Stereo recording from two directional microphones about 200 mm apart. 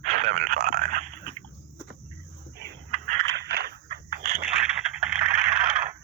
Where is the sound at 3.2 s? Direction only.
55° right (ahead or behind).